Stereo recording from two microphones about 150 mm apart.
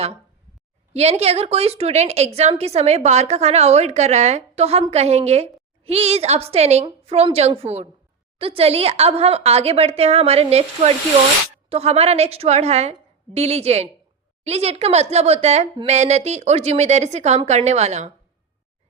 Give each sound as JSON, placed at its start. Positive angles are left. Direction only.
{"t": 0.9, "sound": "a woman's voice", "side_deg": -45}